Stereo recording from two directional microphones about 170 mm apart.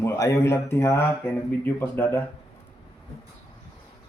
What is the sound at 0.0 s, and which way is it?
Speech, 15° left (ahead or behind).